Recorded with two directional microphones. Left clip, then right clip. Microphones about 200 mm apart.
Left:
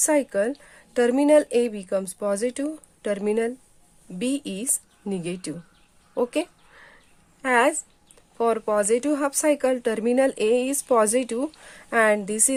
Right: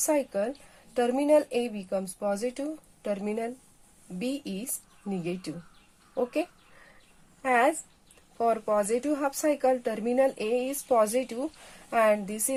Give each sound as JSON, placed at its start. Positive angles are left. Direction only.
{"t": 0.0, "sound": "speech", "side_deg": 50}